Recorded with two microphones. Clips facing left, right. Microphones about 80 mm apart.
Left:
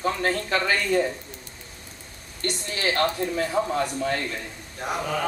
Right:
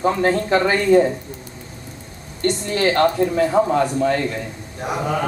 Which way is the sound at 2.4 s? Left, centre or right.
Right.